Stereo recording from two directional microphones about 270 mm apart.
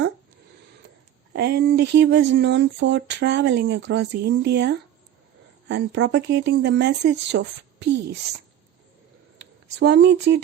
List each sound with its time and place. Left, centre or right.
1.3 s speech: right
9.4 s speech: right